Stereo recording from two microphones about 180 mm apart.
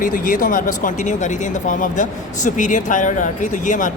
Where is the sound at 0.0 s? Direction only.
50° left (ahead or behind).